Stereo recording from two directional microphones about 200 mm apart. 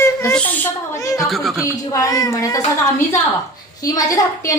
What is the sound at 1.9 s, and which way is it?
Speech, 20° left (ahead or behind).